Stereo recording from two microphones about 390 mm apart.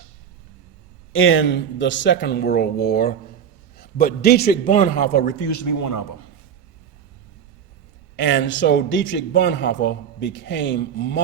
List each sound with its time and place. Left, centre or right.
1.1 s a man's voice: left
5.4 s a man's voice: left
8.1 s a man's voice: left